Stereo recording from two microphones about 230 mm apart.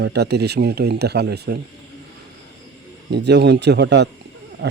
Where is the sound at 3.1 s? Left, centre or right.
Right.